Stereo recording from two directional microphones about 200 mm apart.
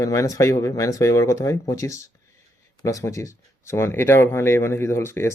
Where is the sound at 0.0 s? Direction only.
15° left (ahead or behind).